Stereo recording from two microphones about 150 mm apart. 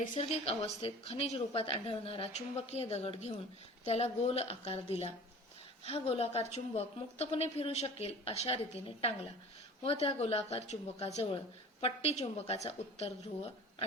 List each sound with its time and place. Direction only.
0.1 s a woman's voice: 40° left (ahead or behind)
9.8 s a woman's voice: 40° left (ahead or behind)